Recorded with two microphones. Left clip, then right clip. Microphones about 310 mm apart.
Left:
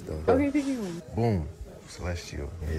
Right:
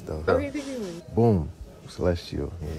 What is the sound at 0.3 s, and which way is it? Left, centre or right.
Speech, left.